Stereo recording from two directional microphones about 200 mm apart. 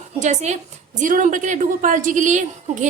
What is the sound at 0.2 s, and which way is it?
A woman's voice, 35° right (ahead or behind).